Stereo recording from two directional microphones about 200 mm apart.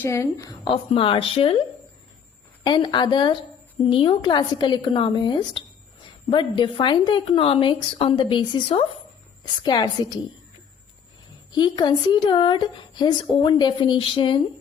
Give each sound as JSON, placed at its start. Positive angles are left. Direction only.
{"t": 0.0, "sound": "speech", "side_deg": 15}
{"t": 2.6, "sound": "speech", "side_deg": 25}
{"t": 11.5, "sound": "speech", "side_deg": 20}